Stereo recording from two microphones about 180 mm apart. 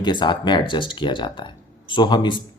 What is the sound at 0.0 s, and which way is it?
Speech, 25° left (ahead or behind).